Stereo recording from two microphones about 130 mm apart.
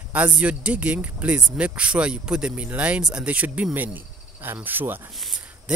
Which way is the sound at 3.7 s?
15° right (ahead or behind).